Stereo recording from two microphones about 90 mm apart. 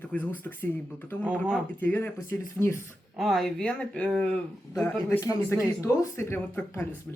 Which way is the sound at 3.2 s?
Centre (ahead or behind).